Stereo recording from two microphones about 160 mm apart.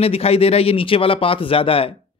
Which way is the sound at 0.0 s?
40° left (ahead or behind).